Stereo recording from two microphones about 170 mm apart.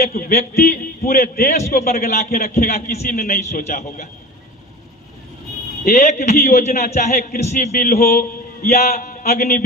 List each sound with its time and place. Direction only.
0.1 s a man's voice: 60° left (ahead or behind)
5.8 s a man's voice: 60° left (ahead or behind)
6.1 s a man's voice: 40° left (ahead or behind)
7.4 s a man's voice: 45° left (ahead or behind)
8.8 s a man's voice: 55° left (ahead or behind)